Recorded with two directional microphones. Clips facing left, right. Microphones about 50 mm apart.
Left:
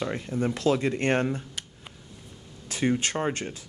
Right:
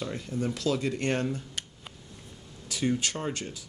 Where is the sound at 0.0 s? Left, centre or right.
Left.